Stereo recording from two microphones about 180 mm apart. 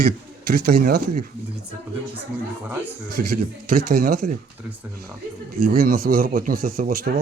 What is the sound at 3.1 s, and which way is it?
Speech, 50° right (ahead or behind).